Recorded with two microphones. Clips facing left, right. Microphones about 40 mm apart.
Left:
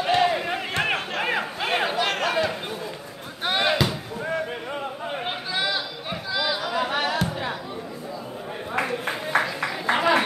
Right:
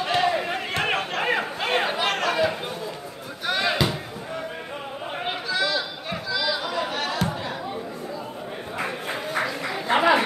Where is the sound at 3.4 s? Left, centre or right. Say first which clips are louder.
Left 1 dB; left.